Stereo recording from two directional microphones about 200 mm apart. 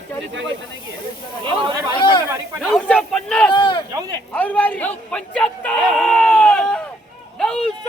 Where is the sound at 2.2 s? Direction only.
15° right (ahead or behind).